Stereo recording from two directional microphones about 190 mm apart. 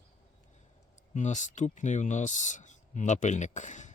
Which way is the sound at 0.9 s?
40° left (ahead or behind).